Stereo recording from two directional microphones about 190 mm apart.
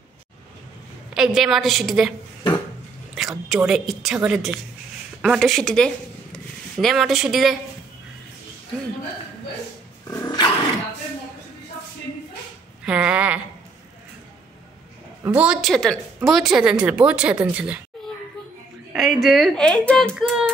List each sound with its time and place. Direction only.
1.1 s speech: 5° right (ahead or behind)
3.2 s speech: centre (ahead or behind)
10.0 s roaring cats: 20° left (ahead or behind)
12.8 s speech: 5° right (ahead or behind)
15.2 s speech: 5° right (ahead or behind)
18.9 s speech: centre (ahead or behind)